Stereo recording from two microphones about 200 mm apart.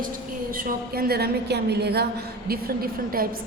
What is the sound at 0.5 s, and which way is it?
A woman's voice, 45° right (ahead or behind).